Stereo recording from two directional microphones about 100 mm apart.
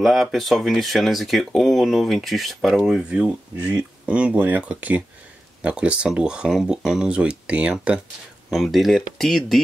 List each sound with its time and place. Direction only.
0.0 s speech: centre (ahead or behind)
8.5 s speech: centre (ahead or behind)